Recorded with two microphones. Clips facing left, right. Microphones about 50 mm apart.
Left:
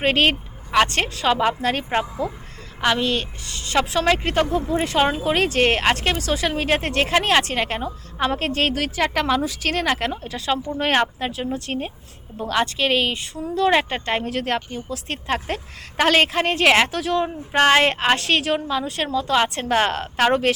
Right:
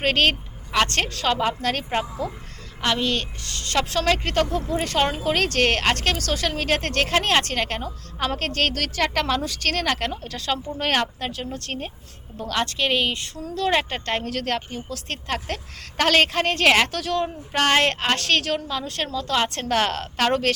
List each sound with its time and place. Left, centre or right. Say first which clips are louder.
0.0 s a woman's voice: left 2 dB; centre